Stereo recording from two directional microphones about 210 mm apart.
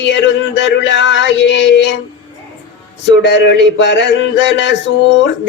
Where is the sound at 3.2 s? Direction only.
55° left (ahead or behind).